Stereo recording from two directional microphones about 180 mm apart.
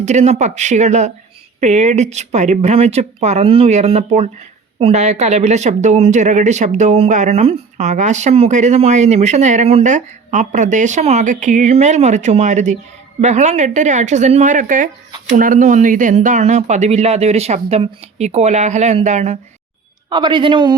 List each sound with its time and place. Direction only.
0.0 s speech: 40° right (ahead or behind)
20.1 s a man's voice: 25° right (ahead or behind)